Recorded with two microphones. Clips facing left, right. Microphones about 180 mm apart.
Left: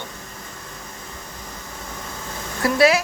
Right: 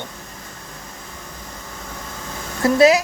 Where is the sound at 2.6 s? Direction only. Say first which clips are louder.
Right 4 dB; 20° right (ahead or behind).